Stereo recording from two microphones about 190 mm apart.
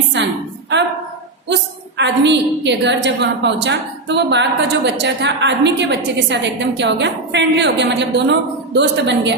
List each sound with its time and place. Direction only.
1.5 s a woman's voice: 65° right (ahead or behind)